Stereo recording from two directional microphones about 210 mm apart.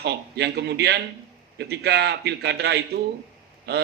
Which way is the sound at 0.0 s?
50° right (ahead or behind).